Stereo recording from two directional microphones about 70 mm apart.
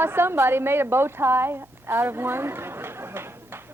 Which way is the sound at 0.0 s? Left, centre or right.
Right.